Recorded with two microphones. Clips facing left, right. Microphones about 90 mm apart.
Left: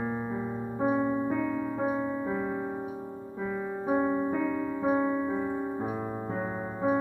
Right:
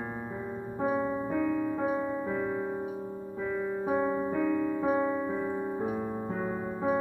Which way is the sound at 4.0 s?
10° left (ahead or behind).